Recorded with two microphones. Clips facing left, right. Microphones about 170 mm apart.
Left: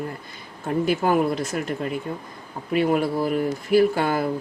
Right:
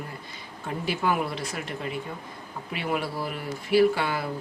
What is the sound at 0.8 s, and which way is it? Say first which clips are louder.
Speech: left 5 dB; 45° left (ahead or behind).